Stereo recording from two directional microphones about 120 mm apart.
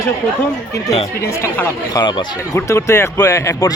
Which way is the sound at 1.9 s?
40° left (ahead or behind).